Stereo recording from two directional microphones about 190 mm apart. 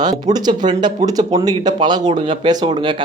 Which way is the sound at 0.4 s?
20° right (ahead or behind).